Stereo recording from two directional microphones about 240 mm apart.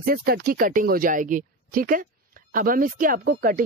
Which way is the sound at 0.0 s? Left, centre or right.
Right.